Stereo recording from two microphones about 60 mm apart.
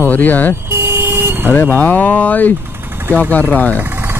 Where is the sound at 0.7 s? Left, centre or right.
Right.